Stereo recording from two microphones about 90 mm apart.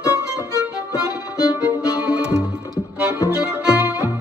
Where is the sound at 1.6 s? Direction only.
15° right (ahead or behind).